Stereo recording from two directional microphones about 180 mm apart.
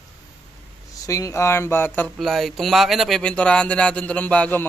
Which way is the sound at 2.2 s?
Centre (ahead or behind).